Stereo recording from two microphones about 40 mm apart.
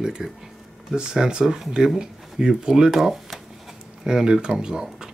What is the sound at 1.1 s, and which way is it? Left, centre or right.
Speech, centre.